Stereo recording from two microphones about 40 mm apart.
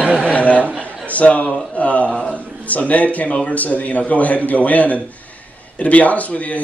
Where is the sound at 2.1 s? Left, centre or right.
Left.